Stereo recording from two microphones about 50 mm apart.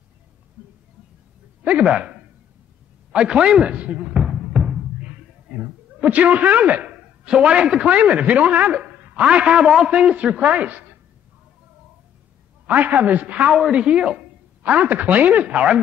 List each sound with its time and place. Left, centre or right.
1.6 s a man's voice: right
4.0 s basketball bounce: centre
5.5 s a man's voice: right
9.3 s a man's voice: centre
12.6 s a man's voice: right
13.5 s a man's voice: centre
14.6 s a man's voice: right